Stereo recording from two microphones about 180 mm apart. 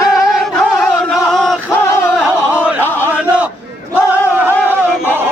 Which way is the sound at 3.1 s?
5° right (ahead or behind).